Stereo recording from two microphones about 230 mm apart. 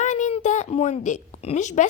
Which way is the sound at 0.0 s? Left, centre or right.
Left.